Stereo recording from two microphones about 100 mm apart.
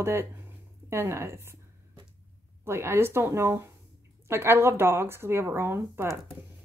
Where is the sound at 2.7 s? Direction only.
25° right (ahead or behind).